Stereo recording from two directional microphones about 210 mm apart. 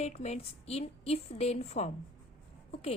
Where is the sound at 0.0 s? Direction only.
30° left (ahead or behind).